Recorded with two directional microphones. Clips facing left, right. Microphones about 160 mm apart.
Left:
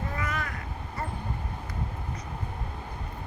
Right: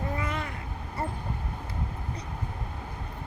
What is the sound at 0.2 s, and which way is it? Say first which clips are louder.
Vehicle: even; 25° right (ahead or behind).